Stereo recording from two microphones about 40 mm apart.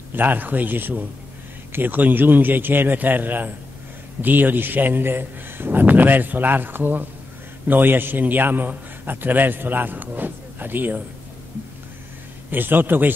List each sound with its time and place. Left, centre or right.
0.1 s a man's voice: right
12.4 s a man's voice: right